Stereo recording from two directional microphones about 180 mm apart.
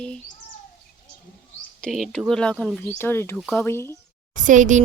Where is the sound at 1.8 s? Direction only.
5° left (ahead or behind).